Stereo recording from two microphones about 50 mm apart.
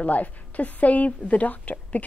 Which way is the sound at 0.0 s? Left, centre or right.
Left.